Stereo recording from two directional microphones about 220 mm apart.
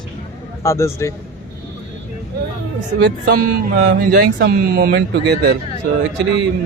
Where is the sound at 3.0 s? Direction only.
45° right (ahead or behind).